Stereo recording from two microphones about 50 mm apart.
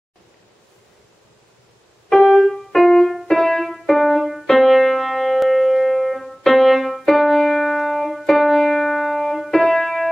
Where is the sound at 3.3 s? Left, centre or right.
Centre.